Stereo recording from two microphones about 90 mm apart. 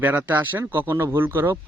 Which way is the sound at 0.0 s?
20° right (ahead or behind).